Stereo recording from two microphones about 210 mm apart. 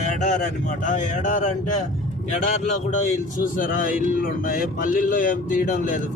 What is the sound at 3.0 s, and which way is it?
Speech, 35° left (ahead or behind).